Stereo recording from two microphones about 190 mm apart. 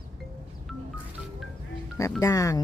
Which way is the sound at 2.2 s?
20° left (ahead or behind).